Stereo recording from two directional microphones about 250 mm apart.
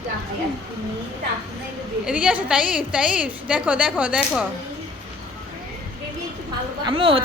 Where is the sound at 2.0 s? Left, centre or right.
Centre.